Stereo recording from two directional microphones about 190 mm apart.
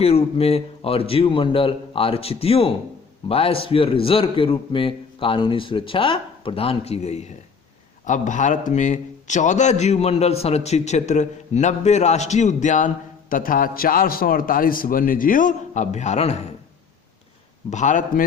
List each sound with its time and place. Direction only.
0.0 s a man's voice: 30° left (ahead or behind)
17.7 s a man's voice: 40° left (ahead or behind)